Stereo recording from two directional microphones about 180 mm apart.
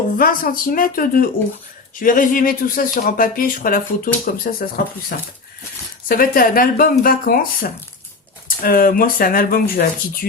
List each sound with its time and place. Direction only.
0.2 s speech: 55° left (ahead or behind)